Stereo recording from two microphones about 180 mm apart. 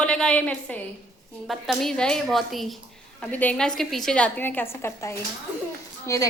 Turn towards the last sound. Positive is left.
turn(degrees=15)  # may be behind; listen again after turning